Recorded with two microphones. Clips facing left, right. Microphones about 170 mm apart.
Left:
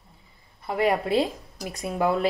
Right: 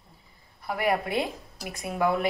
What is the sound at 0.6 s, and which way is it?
Speech, 25° left (ahead or behind).